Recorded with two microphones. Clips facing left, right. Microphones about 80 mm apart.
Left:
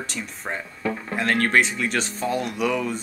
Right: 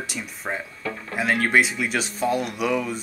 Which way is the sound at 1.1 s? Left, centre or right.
Centre.